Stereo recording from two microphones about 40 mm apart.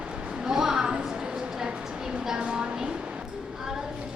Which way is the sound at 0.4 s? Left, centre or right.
Centre.